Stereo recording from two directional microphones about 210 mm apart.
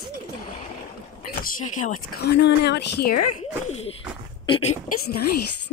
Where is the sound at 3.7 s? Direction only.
30° left (ahead or behind).